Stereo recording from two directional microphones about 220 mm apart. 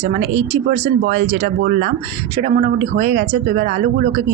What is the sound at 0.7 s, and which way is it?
Speech, 40° right (ahead or behind).